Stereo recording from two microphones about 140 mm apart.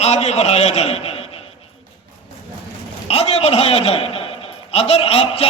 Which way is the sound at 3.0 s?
45° left (ahead or behind).